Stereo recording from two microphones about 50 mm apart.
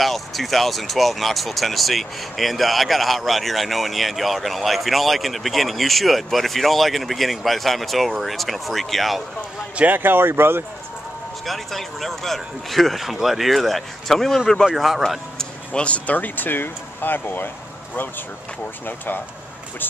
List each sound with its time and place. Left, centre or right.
0.0 s speech: centre
9.8 s speech: right
11.4 s speech: centre
15.3 s speech: left
18.9 s speech: left